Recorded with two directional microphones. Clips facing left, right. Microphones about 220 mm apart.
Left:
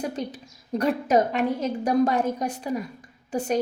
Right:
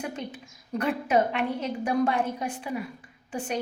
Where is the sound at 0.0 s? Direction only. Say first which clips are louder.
Left 4 dB; 35° left (ahead or behind).